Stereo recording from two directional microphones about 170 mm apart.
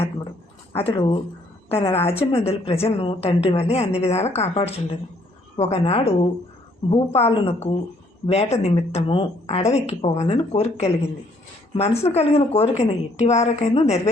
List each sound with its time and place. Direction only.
0.8 s a woman's voice: 30° left (ahead or behind)